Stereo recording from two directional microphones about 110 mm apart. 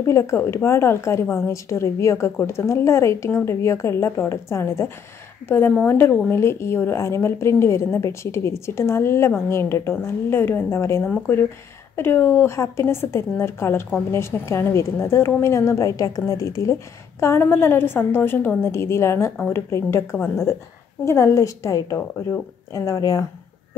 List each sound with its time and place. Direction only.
0.0 s a woman's voice: 25° left (ahead or behind)